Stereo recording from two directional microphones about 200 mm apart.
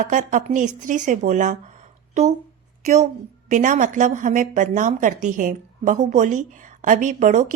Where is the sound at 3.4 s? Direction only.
40° right (ahead or behind).